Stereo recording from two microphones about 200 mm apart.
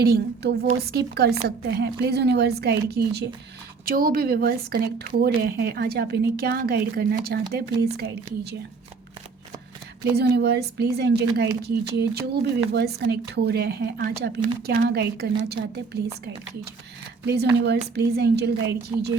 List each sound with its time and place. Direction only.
0.0 s a woman's voice: 50° right (ahead or behind)
10.0 s a woman's voice: 55° right (ahead or behind)
17.9 s a woman's voice: 55° right (ahead or behind)